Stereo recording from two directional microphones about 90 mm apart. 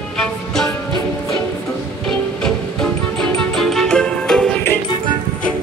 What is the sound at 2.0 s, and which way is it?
Music, 5° left (ahead or behind).